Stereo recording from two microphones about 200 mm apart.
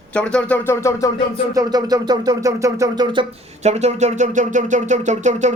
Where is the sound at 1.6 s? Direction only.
20° right (ahead or behind).